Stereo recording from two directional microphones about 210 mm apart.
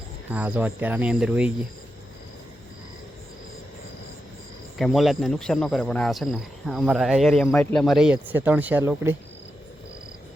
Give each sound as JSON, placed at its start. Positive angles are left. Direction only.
{"t": 0.3, "sound": "speech", "side_deg": -10}
{"t": 4.8, "sound": "speech", "side_deg": 0}